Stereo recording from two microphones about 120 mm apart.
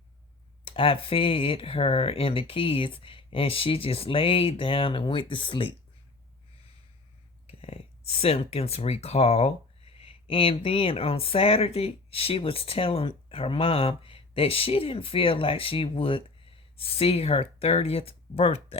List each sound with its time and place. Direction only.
0.6 s speech: 50° left (ahead or behind)
7.4 s speech: 55° left (ahead or behind)